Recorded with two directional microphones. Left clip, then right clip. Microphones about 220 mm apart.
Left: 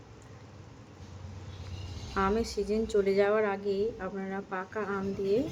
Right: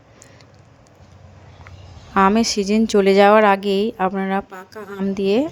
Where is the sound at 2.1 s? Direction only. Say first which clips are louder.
Right 13 dB; 45° right (ahead or behind).